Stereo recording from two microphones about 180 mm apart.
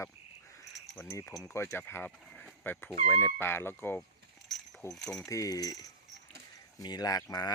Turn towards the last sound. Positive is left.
turn(degrees=20)  # may be behind; listen again after turning